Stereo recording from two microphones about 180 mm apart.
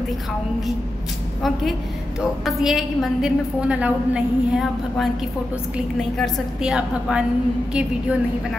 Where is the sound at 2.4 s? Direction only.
Centre (ahead or behind).